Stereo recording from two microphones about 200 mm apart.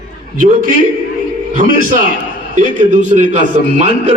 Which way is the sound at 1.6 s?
45° right (ahead or behind).